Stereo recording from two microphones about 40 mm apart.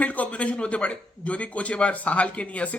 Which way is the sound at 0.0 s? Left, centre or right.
Left.